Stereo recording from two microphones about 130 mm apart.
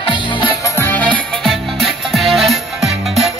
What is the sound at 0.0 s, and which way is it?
Music, 40° left (ahead or behind).